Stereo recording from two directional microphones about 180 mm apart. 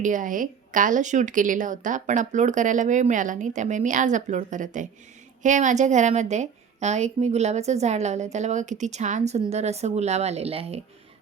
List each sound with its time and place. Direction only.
0.0 s a woman's voice: 45° right (ahead or behind)